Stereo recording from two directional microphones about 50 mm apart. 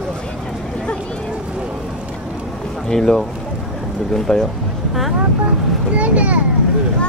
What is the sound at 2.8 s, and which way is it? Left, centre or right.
Speech, centre.